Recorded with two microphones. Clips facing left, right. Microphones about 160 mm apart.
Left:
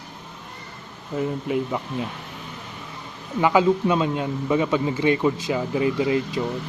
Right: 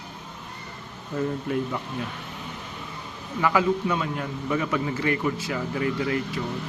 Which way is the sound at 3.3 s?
20° left (ahead or behind).